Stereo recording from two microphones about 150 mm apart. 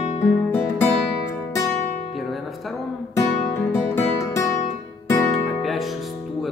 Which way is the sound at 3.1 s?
15° left (ahead or behind).